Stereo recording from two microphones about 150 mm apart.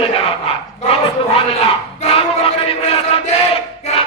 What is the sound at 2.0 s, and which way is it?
Battle cry, 40° left (ahead or behind).